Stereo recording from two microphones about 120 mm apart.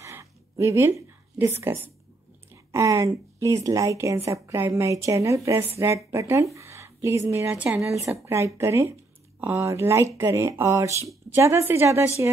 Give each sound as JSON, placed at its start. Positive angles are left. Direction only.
{"t": 0.0, "sound": "a sound", "side_deg": -25}
{"t": 1.4, "sound": "a woman's voice", "side_deg": -20}
{"t": 2.5, "sound": "a sound", "side_deg": -25}
{"t": 3.3, "sound": "a woman's voice", "side_deg": -25}
{"t": 7.5, "sound": "speech", "side_deg": -10}
{"t": 7.8, "sound": "a woman's voice", "side_deg": -25}